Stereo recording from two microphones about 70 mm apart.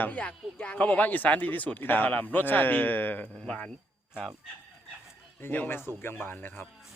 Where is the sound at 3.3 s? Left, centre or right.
Centre.